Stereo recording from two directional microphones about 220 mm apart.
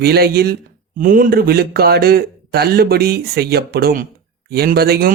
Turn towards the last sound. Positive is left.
turn(degrees=-45)  # may be behind; listen again after turning